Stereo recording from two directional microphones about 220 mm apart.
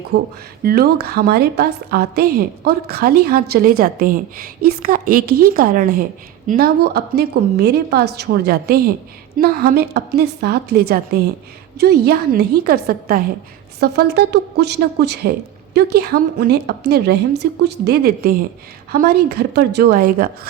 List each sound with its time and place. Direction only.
0.6 s a woman's voice: 45° right (ahead or behind)